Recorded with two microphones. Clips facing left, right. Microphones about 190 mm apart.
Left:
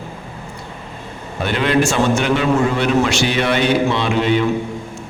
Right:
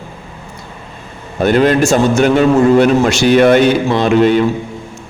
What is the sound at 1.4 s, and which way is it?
A man's voice, 45° right (ahead or behind).